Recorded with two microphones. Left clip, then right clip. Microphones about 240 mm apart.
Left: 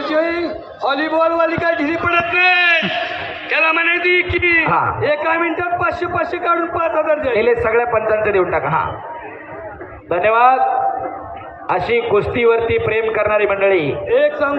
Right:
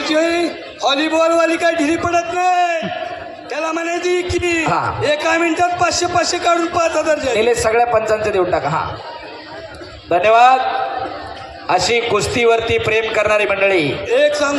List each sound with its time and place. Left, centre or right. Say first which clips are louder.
0.0 s a sound: right 2 dB; right
3.6 s a man's voice: left 5 dB; right
10.1 s a man's voice: right 2 dB; right
11.7 s a man's voice: right 1 dB; right